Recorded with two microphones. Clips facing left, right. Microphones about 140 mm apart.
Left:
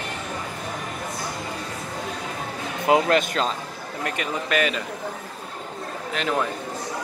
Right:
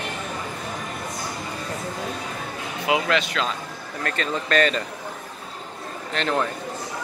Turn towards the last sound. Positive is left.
turn(degrees=5)  # may be behind; listen again after turning